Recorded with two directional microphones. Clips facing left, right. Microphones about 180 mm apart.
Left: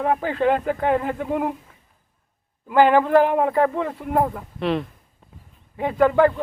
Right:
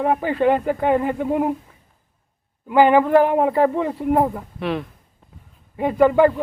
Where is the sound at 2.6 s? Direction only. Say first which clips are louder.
Right 2 dB; 10° right (ahead or behind).